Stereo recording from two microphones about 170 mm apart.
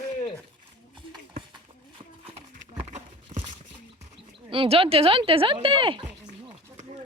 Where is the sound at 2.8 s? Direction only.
35° right (ahead or behind).